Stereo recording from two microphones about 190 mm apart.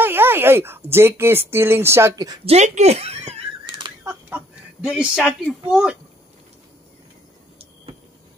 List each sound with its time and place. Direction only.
0.0 s speech: 10° right (ahead or behind)
2.4 s a sound: 35° right (ahead or behind); by 4.4 s 15° right (ahead or behind)
4.8 s speech: 5° right (ahead or behind)